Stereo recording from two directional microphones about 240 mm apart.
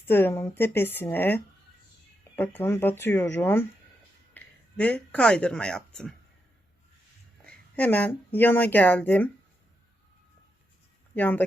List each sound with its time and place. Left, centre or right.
0.1 s speech: centre
7.4 s speech: centre
11.1 s speech: centre